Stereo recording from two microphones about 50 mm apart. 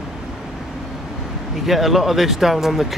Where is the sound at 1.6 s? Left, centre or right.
Centre.